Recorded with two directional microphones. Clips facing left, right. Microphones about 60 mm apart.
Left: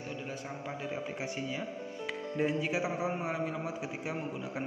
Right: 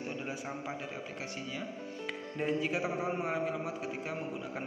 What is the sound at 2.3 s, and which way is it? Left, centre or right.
A man's voice, centre.